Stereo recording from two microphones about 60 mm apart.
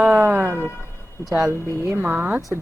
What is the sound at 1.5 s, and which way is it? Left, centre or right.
Speech, left.